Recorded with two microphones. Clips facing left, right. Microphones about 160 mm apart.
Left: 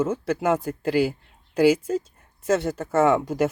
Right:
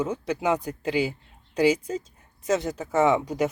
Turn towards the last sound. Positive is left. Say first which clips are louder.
# left 2 dB
turn(degrees=5)  # may be behind; listen again after turning